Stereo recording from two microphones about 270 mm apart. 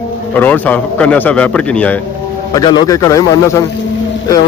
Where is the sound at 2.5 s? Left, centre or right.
Centre.